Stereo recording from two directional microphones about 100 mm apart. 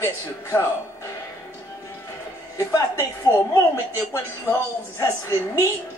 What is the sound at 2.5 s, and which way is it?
A woman's voice, 30° left (ahead or behind).